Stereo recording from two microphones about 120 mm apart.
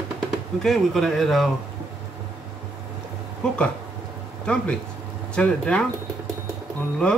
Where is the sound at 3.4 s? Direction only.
5° left (ahead or behind).